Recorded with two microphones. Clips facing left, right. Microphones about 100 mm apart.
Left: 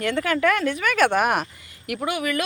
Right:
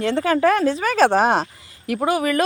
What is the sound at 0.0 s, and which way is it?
Speech, 30° right (ahead or behind).